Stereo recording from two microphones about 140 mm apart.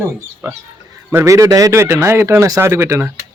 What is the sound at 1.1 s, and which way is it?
Speech, 20° right (ahead or behind).